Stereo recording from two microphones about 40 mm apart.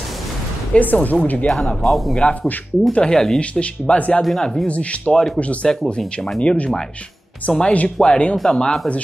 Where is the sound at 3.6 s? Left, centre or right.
Left; by 5.8 s centre.